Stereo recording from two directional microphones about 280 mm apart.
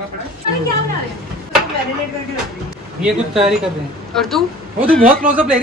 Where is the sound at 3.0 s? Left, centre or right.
Centre.